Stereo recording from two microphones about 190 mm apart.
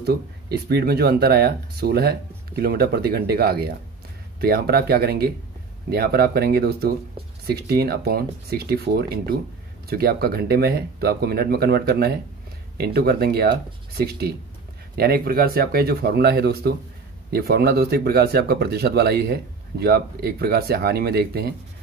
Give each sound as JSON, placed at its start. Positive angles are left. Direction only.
{"t": 0.0, "sound": "speech", "side_deg": -55}